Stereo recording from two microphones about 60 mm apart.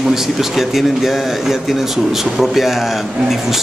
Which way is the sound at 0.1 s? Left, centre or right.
Centre.